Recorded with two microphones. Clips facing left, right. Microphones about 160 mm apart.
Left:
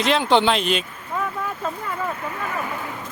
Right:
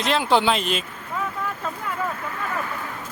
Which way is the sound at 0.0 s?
Centre (ahead or behind).